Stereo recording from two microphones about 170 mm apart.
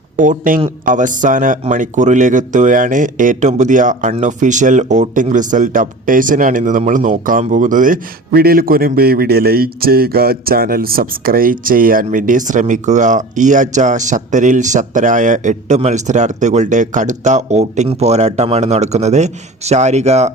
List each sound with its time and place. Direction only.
0.2 s speech: 50° right (ahead or behind)